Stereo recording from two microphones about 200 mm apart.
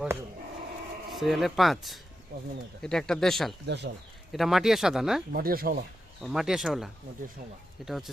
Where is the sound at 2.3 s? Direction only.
55° right (ahead or behind).